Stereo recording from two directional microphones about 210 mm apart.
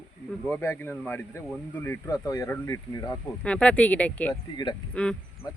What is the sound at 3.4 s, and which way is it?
Speech, 5° left (ahead or behind).